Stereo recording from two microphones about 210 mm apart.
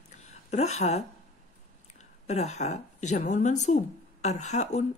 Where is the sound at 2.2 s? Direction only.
30° left (ahead or behind).